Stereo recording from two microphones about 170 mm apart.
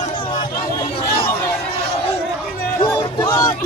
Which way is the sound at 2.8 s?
20° left (ahead or behind).